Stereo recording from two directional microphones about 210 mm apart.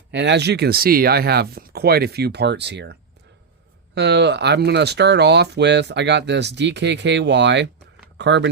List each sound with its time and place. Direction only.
0.1 s speech: 55° right (ahead or behind)